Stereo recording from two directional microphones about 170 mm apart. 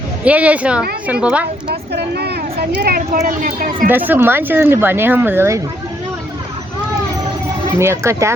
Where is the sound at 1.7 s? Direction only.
70° right (ahead or behind).